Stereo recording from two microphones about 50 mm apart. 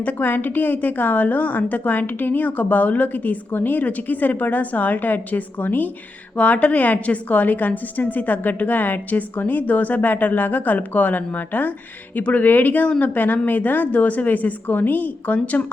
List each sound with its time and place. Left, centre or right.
0.0 s a woman's voice: left